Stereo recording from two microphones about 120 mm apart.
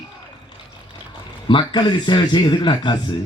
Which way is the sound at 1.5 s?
40° left (ahead or behind).